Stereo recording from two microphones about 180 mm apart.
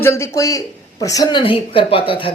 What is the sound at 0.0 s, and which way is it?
A man's voice, 15° left (ahead or behind).